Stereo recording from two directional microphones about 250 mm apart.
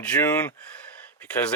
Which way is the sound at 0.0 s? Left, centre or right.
Centre.